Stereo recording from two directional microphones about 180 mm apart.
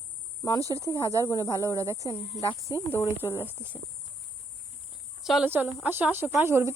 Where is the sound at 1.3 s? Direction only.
20° left (ahead or behind).